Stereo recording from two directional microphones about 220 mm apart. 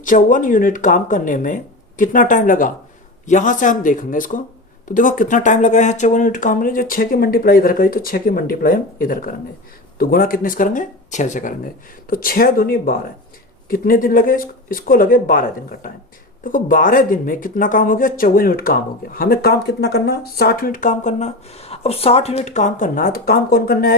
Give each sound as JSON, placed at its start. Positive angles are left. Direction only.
{"t": 0.0, "sound": "speech", "side_deg": 35}